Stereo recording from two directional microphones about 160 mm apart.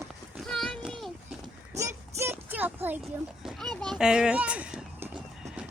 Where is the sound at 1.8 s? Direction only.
15° right (ahead or behind).